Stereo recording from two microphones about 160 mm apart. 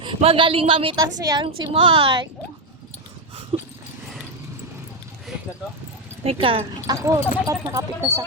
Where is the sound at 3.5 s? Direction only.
35° right (ahead or behind).